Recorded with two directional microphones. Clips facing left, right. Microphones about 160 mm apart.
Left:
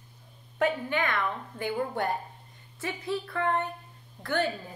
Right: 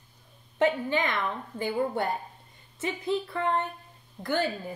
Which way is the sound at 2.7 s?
20° right (ahead or behind).